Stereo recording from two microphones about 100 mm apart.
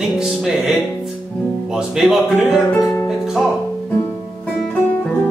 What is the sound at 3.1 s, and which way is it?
Music, 5° right (ahead or behind).